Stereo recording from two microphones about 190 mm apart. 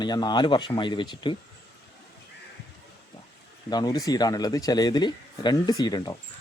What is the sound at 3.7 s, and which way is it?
Speech, 20° left (ahead or behind).